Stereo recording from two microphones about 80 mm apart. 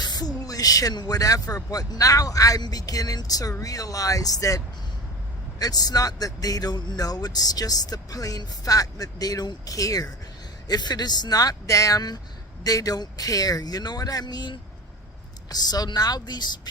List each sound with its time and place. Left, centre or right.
0.0 s speech: left
10.7 s speech: left
15.4 s speech: left